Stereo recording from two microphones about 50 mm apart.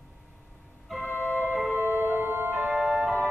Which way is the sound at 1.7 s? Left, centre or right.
Right.